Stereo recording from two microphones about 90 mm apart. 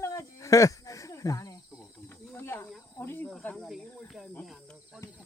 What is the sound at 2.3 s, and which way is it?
Snake, 30° left (ahead or behind).